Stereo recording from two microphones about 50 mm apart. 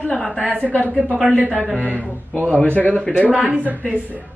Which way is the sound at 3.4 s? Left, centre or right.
Right.